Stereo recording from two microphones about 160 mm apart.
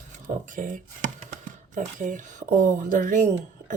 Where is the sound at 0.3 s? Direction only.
55° right (ahead or behind).